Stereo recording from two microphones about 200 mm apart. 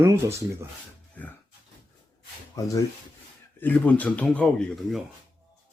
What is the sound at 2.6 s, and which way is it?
Speech, 15° left (ahead or behind).